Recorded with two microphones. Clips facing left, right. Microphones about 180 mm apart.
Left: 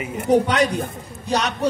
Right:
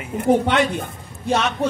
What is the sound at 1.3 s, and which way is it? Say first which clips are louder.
Speech: right 1 dB; 40° left (ahead or behind).